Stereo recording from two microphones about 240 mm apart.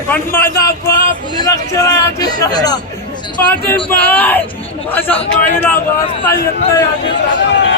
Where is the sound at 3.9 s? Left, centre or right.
Centre.